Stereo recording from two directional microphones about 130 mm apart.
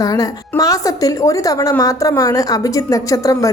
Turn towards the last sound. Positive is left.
turn(degrees=25)  # may be behind; listen again after turning